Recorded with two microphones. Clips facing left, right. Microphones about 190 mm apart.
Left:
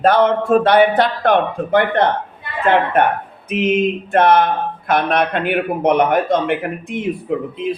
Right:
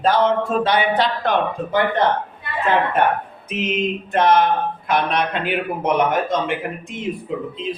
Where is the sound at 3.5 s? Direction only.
55° left (ahead or behind).